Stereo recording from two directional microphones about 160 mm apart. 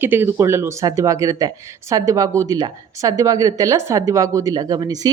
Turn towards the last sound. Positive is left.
turn(degrees=-25)  # may be behind; listen again after turning